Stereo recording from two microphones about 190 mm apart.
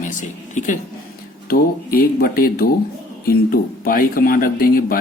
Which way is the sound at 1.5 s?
50° left (ahead or behind).